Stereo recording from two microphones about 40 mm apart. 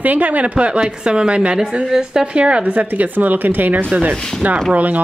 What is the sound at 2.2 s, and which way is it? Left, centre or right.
Speech, right.